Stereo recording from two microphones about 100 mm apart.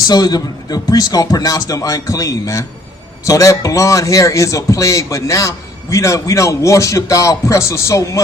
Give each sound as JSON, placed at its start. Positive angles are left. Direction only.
{"t": 0.1, "sound": "a man's voice", "side_deg": 40}